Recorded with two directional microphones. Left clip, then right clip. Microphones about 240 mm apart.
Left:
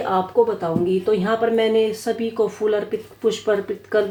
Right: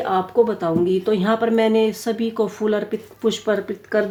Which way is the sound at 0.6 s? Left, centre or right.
Right.